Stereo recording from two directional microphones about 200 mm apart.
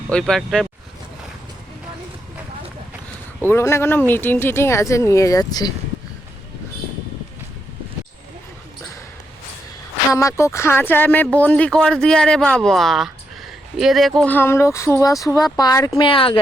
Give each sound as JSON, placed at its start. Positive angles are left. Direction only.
{"t": 0.1, "sound": "speech", "side_deg": 5}
{"t": 3.4, "sound": "speech", "side_deg": 15}
{"t": 10.1, "sound": "speech", "side_deg": 15}